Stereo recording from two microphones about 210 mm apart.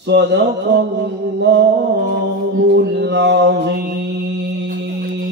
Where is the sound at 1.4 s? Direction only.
55° right (ahead or behind).